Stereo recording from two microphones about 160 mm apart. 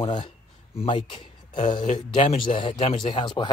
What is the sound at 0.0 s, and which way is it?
Speech, 30° left (ahead or behind).